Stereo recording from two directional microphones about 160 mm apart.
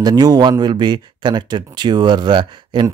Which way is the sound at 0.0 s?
25° right (ahead or behind).